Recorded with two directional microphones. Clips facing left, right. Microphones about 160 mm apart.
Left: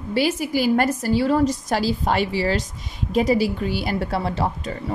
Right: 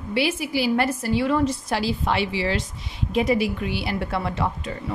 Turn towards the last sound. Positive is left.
turn(degrees=35)  # may be behind; listen again after turning